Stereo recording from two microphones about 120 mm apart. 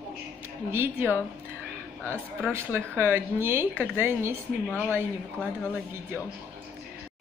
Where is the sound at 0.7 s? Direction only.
20° right (ahead or behind).